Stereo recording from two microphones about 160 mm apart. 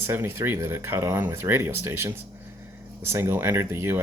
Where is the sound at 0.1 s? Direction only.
15° right (ahead or behind).